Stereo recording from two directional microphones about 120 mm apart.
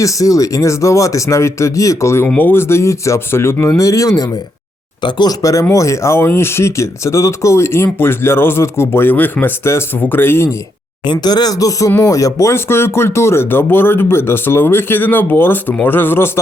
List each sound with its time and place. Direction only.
0.0 s speech: 30° left (ahead or behind)
2.2 s speech: 15° left (ahead or behind)
5.0 s speech: 40° left (ahead or behind)
5.4 s speech: 25° left (ahead or behind)
11.1 s speech: 35° left (ahead or behind); by 16.3 s 20° left (ahead or behind)